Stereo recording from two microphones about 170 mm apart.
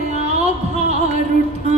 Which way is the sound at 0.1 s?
40° right (ahead or behind).